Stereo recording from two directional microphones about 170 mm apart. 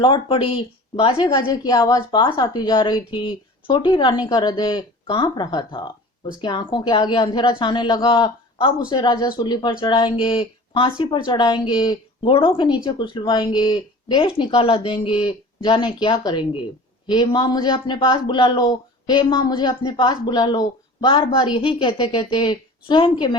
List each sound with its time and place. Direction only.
0.0 s speech: 30° left (ahead or behind)